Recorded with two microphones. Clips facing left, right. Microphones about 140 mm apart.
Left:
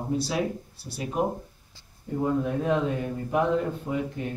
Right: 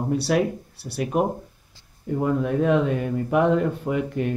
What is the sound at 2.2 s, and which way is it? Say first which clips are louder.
Speech: right 4 dB; 70° right (ahead or behind).